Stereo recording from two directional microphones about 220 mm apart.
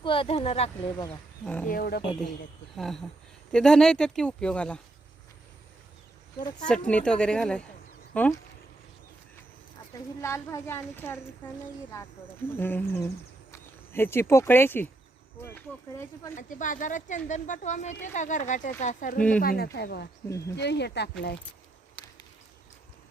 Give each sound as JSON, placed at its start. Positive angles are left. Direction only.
{"t": 0.0, "sound": "speech", "side_deg": 25}
{"t": 1.0, "sound": "a woman's voice", "side_deg": 5}
{"t": 1.6, "sound": "speech", "side_deg": 40}
{"t": 2.7, "sound": "speech", "side_deg": 0}
{"t": 6.8, "sound": "speech", "side_deg": 5}
{"t": 9.9, "sound": "a woman's voice", "side_deg": 10}
{"t": 12.5, "sound": "a woman's voice", "side_deg": 10}
{"t": 16.3, "sound": "speech", "side_deg": 35}
{"t": 20.2, "sound": "a woman's voice", "side_deg": 15}
{"t": 20.6, "sound": "speech", "side_deg": 50}
{"t": 21.9, "sound": "a sound", "side_deg": 15}